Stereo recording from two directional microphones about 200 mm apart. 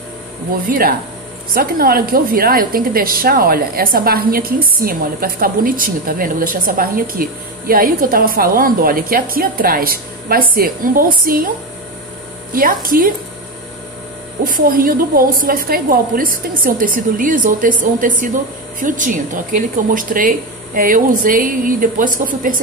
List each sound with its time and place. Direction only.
0.7 s a woman's voice: 45° right (ahead or behind)
12.5 s a woman's voice: 45° right (ahead or behind)
14.4 s a woman's voice: 45° right (ahead or behind)